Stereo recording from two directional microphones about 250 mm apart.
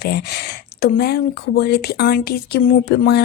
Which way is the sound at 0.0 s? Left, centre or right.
Left.